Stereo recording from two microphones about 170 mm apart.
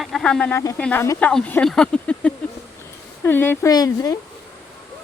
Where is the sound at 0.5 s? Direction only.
20° left (ahead or behind).